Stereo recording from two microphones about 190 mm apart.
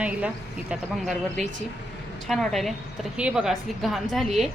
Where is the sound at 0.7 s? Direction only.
Centre (ahead or behind).